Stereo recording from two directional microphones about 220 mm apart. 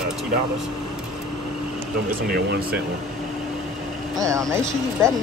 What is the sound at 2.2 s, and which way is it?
Speech, 45° right (ahead or behind).